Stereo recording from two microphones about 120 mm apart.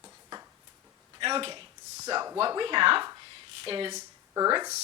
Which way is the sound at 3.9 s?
30° right (ahead or behind).